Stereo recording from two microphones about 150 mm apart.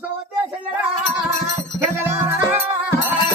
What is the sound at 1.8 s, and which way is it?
Music, 15° right (ahead or behind).